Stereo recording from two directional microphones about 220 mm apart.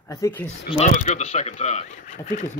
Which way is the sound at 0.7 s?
30° left (ahead or behind).